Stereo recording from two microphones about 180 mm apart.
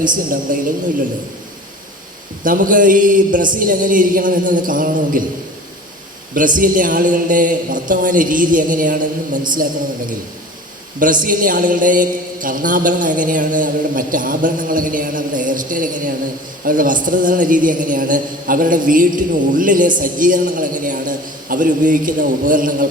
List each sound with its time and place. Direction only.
0.5 s a woman's voice: 50° right (ahead or behind)
2.4 s a woman's voice: 50° right (ahead or behind)
6.6 s a woman's voice: 50° right (ahead or behind)
11.0 s a woman's voice: 50° right (ahead or behind)